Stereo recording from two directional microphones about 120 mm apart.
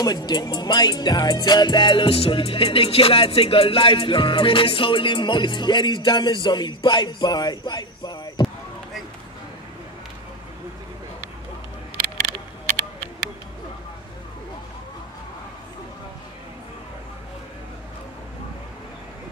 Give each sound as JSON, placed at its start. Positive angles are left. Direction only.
{"t": 0.0, "sound": "music", "side_deg": 35}